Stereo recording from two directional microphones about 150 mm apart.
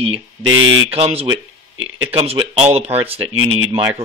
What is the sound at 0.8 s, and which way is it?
Speech, 40° right (ahead or behind).